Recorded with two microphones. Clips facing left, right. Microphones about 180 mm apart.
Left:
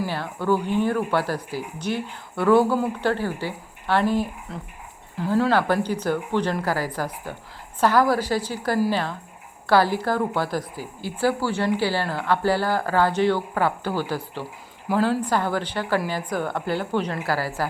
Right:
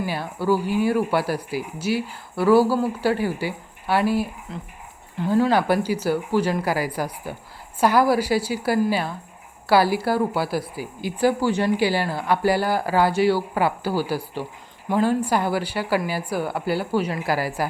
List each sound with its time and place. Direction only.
0.0 s a woman's voice: 10° right (ahead or behind)